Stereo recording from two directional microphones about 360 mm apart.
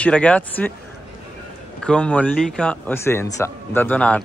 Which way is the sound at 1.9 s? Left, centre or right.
Centre.